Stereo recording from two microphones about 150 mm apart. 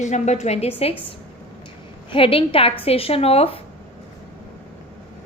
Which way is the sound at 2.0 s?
35° left (ahead or behind).